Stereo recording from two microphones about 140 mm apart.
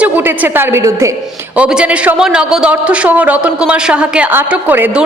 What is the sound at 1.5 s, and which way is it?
A man's voice, 5° right (ahead or behind).